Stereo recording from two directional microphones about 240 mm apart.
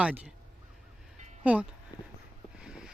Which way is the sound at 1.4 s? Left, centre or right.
Centre.